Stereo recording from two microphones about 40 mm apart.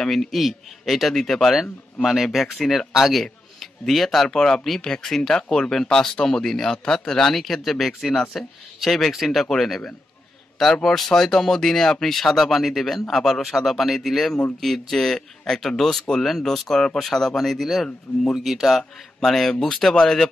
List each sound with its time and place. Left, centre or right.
0.0 s a man's voice: centre
4.3 s speech: centre
7.3 s a man's voice: centre
18.8 s a man's voice: centre